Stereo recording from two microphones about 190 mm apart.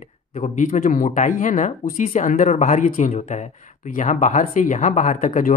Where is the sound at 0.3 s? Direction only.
40° left (ahead or behind).